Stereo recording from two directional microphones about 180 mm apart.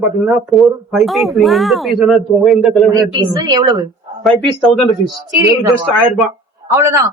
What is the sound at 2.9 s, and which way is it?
Speech, 20° right (ahead or behind).